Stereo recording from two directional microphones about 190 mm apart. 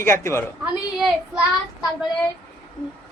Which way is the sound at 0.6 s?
5° right (ahead or behind).